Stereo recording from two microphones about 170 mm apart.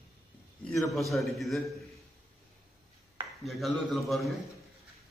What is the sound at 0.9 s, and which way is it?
Speech, centre (ahead or behind).